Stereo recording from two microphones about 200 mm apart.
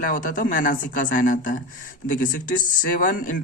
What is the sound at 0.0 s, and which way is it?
Speech, 40° left (ahead or behind).